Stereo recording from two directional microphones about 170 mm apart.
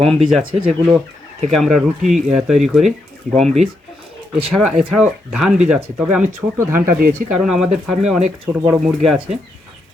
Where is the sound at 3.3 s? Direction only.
45° right (ahead or behind).